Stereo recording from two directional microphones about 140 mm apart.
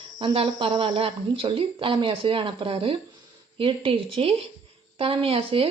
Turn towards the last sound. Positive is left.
turn(degrees=-40)  # may be behind; listen again after turning